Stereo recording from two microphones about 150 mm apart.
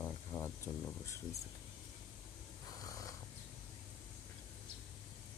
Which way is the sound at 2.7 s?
25° left (ahead or behind).